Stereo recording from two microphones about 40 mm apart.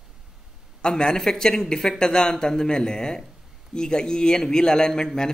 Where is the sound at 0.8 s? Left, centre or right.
Centre.